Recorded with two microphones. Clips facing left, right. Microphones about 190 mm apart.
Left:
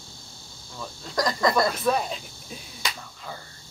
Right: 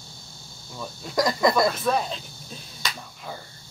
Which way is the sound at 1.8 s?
5° left (ahead or behind).